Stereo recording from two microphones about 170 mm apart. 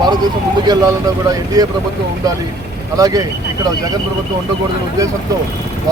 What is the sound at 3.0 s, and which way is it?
Speech, 20° right (ahead or behind).